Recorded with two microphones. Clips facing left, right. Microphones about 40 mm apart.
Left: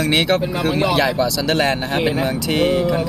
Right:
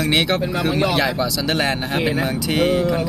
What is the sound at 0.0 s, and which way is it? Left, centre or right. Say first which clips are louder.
Speech: left 2 dB; centre.